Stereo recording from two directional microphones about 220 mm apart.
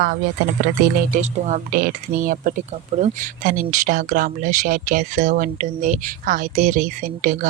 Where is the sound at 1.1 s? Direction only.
30° right (ahead or behind).